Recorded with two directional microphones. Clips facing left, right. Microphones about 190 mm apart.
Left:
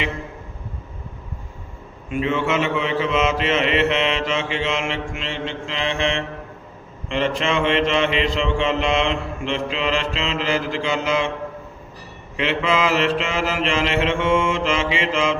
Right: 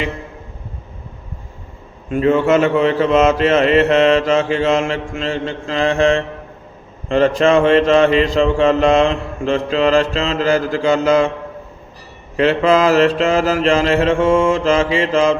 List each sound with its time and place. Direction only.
2.0 s a man's voice: 40° right (ahead or behind)
12.4 s a man's voice: 40° right (ahead or behind)